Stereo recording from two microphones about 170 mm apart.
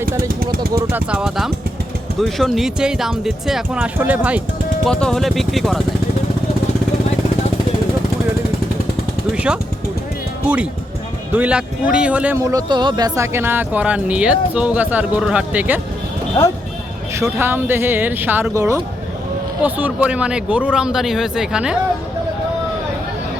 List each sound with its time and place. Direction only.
0.3 s a sound: 60° right (ahead or behind)
0.9 s speech: 10° right (ahead or behind)
4.9 s speech: 5° left (ahead or behind)
9.3 s a sound: 5° right (ahead or behind)
10.4 s speech: 10° right (ahead or behind)
17.2 s speech: 15° right (ahead or behind)